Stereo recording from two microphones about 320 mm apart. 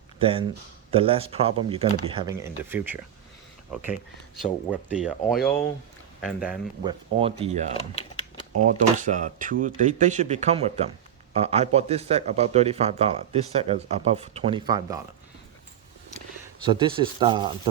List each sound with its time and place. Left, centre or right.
0.2 s speech: centre
4.7 s speech: centre
6.8 s speech: centre
7.7 s typing: centre
8.6 s speech: right
16.6 s speech: centre